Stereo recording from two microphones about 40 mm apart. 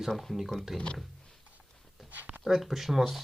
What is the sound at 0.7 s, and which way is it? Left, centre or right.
Speech, left.